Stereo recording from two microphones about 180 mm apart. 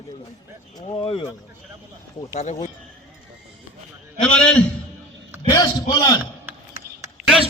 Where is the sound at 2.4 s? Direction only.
40° left (ahead or behind).